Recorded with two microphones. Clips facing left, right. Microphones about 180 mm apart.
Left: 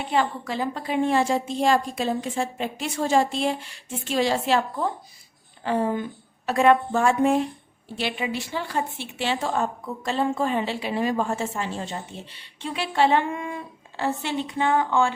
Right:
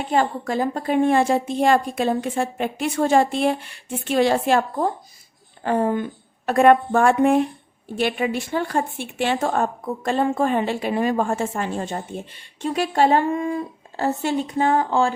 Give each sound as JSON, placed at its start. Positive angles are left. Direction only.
{"t": 0.1, "sound": "a woman's voice", "side_deg": -45}